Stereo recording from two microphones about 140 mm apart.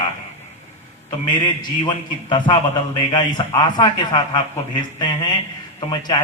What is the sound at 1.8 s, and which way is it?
A man's voice, 35° left (ahead or behind).